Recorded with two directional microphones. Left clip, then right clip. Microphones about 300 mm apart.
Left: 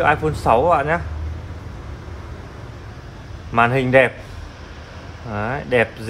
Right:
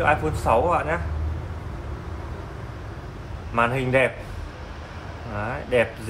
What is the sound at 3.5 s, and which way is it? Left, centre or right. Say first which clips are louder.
Speech: left 6 dB; left.